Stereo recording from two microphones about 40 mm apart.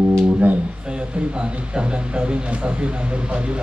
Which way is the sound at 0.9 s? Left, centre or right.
Right.